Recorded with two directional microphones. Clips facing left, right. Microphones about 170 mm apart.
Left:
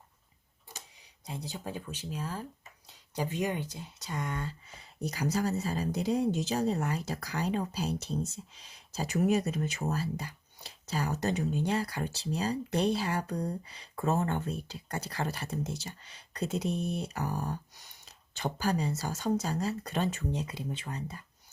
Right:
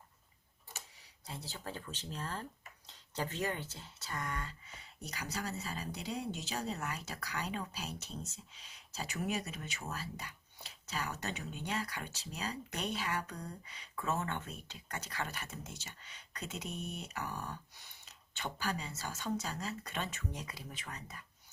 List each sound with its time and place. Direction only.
1.3 s speech: 15° left (ahead or behind)
5.1 s speech: 40° left (ahead or behind)